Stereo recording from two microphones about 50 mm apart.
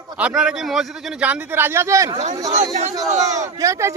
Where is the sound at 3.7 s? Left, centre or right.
Right.